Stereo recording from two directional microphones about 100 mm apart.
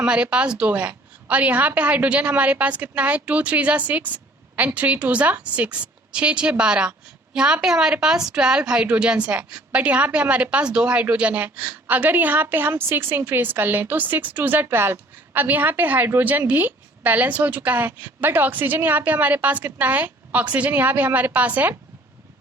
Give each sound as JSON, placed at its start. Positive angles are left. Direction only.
{"t": 0.0, "sound": "a woman's voice", "side_deg": -10}